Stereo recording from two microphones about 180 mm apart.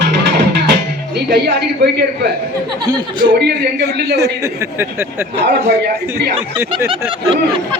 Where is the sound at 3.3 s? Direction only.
60° right (ahead or behind).